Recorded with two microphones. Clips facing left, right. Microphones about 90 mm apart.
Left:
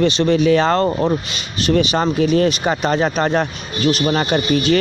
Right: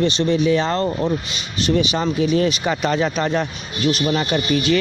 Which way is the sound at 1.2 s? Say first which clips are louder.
Left 2 dB; 65° left (ahead or behind).